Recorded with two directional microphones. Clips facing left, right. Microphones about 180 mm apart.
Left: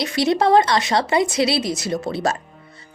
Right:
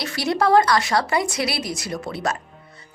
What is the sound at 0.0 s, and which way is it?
Speech, 20° left (ahead or behind).